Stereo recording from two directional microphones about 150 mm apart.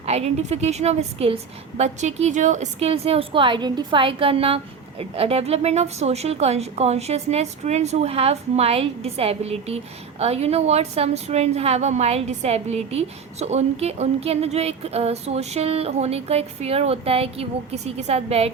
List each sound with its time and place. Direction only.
0.0 s a woman's voice: 45° right (ahead or behind)